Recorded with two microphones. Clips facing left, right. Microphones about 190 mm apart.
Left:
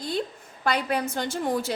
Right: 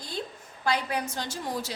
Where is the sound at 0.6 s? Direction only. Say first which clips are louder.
Left 3 dB; 60° left (ahead or behind).